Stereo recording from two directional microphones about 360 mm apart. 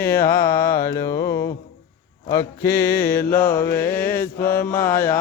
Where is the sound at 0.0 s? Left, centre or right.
Left.